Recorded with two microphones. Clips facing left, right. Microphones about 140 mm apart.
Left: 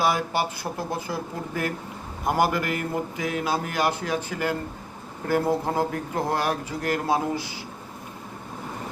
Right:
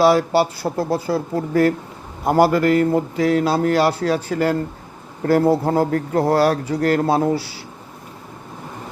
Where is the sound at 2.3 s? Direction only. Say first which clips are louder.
Right 8 dB; 35° right (ahead or behind).